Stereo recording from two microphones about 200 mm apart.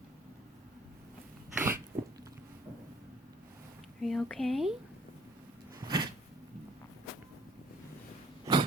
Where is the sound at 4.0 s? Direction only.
Centre (ahead or behind).